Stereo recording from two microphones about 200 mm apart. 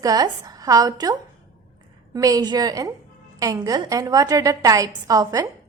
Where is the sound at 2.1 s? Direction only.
20° right (ahead or behind).